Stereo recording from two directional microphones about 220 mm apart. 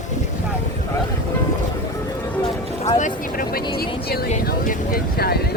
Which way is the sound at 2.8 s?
30° left (ahead or behind).